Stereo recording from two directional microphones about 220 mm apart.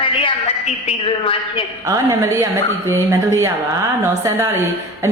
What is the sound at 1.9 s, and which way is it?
A woman's voice, 15° right (ahead or behind).